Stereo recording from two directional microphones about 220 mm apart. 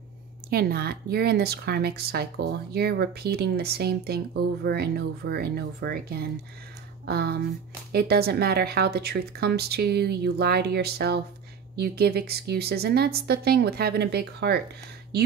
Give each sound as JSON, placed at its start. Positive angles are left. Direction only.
{"t": 0.5, "sound": "speech", "side_deg": -45}